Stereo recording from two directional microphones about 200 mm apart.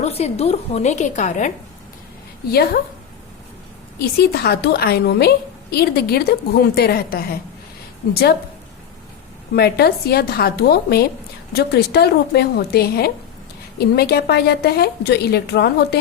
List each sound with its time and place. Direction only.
0.0 s a woman's voice: 30° left (ahead or behind)
2.5 s a woman's voice: 50° left (ahead or behind)
4.0 s a woman's voice: 55° left (ahead or behind)
9.6 s a woman's voice: 50° left (ahead or behind)